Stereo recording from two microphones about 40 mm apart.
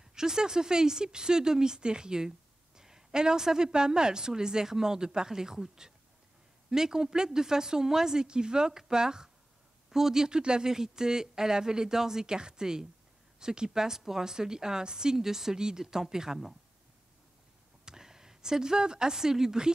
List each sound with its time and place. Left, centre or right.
0.0 s speech: centre
17.8 s speech: centre